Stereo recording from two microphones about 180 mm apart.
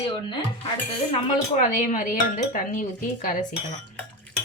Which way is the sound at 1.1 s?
40° left (ahead or behind).